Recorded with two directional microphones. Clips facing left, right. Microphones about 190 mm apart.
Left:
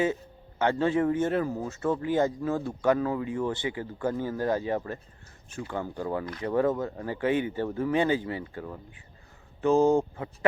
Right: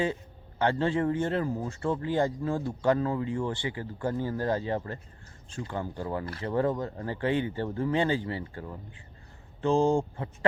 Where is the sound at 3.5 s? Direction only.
20° left (ahead or behind).